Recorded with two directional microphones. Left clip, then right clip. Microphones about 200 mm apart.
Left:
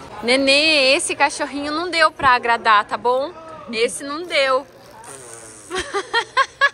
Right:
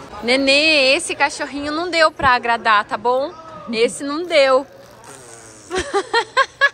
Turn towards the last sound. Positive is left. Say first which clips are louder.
# right 1 dB
turn(degrees=-15)  # may be behind; listen again after turning